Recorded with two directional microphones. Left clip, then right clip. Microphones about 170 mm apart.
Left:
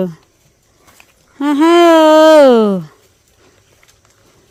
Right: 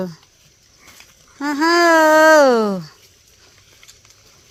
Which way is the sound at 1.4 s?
65° left (ahead or behind).